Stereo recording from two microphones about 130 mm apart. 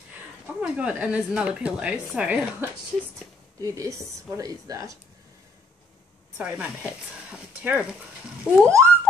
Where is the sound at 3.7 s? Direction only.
25° right (ahead or behind).